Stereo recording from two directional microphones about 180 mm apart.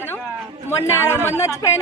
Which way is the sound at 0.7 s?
15° left (ahead or behind).